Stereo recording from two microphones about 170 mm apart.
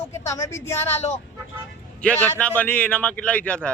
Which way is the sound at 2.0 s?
10° left (ahead or behind).